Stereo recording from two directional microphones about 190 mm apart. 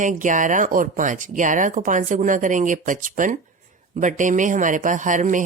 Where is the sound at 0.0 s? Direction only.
40° right (ahead or behind).